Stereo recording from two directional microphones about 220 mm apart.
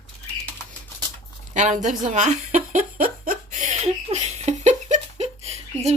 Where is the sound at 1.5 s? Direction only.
35° right (ahead or behind).